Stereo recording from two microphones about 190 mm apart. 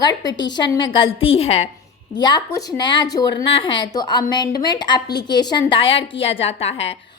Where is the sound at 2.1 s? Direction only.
20° left (ahead or behind).